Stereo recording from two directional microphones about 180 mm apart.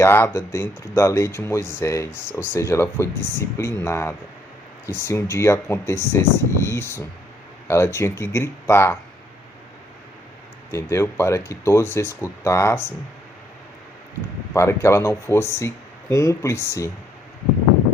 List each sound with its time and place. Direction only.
0.0 s speech: 15° left (ahead or behind)
10.7 s speech: 15° left (ahead or behind)
14.5 s speech: 15° left (ahead or behind)